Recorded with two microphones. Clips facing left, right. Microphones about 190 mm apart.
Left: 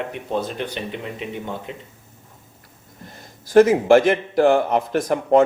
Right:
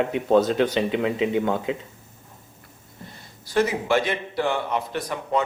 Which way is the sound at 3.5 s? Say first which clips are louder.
Left 9 dB; 50° left (ahead or behind).